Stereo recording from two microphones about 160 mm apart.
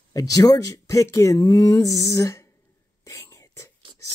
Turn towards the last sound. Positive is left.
turn(degrees=20)  # may be behind; listen again after turning